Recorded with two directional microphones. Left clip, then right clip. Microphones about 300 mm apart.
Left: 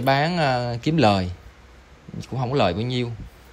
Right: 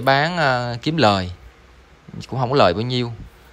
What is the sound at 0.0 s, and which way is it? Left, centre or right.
Speech, centre.